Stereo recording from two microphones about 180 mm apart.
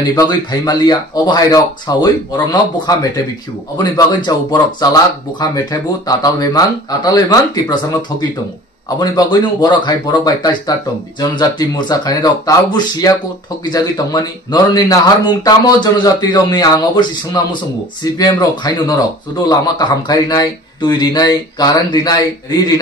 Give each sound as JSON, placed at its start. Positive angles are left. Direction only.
{"t": 0.0, "sound": "speech", "side_deg": 20}